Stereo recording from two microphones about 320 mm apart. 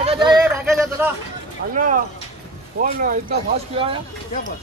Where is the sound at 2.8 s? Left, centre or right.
Right.